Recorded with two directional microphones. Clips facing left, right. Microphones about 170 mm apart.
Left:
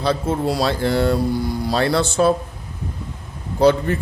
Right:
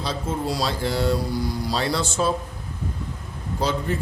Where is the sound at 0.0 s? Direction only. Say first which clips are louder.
Left 7 dB; 60° left (ahead or behind).